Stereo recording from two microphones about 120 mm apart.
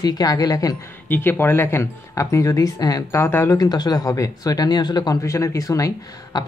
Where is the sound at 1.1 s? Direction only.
15° left (ahead or behind).